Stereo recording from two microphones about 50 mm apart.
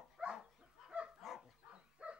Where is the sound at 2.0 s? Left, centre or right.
Right.